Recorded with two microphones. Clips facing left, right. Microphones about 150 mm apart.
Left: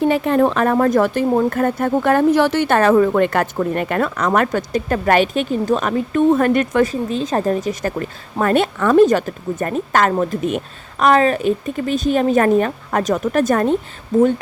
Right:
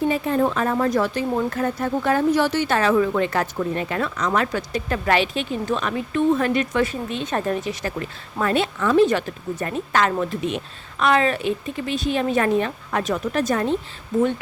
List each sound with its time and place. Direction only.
0.0 s speech: 70° left (ahead or behind); by 6.9 s 50° left (ahead or behind)
7.1 s speech: 35° left (ahead or behind); by 9.0 s 55° left (ahead or behind)
9.0 s speech: 45° left (ahead or behind)